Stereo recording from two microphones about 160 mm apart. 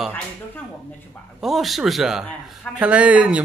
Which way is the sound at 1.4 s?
Centre (ahead or behind).